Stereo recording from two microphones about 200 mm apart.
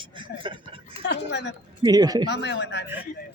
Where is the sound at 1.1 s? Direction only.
60° left (ahead or behind).